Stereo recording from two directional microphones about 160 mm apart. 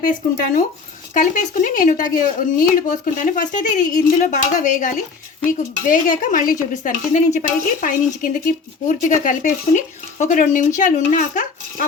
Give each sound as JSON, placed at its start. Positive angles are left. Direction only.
{"t": 0.0, "sound": "a woman's voice", "side_deg": 55}